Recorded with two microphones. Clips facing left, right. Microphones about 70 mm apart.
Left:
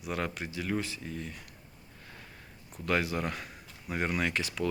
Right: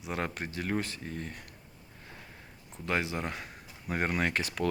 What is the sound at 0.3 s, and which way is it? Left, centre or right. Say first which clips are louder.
Speech: even; right.